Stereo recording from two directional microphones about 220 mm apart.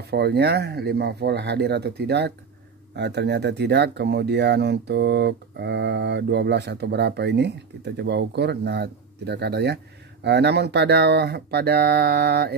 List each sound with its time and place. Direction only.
0.0 s speech: 50° right (ahead or behind)